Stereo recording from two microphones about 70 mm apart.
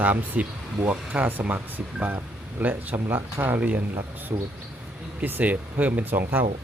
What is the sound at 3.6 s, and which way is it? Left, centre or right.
Speech, right.